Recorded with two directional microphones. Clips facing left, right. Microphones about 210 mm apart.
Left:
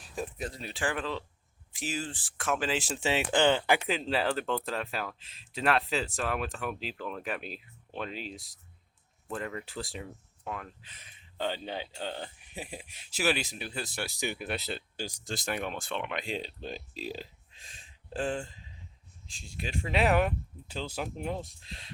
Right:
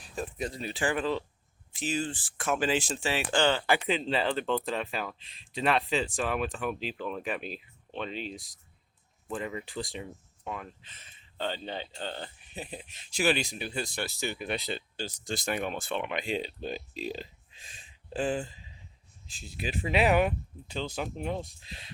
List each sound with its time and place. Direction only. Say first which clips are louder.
0.0 s speech: right 2 dB; 5° left (ahead or behind)
3.0 s speech: left 5 dB; 20° left (ahead or behind)
3.8 s speech: right 1 dB; centre (ahead or behind)
14.4 s speech: right 2 dB; centre (ahead or behind)